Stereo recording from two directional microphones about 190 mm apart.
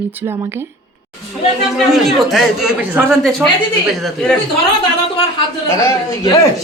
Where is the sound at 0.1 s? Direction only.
10° right (ahead or behind).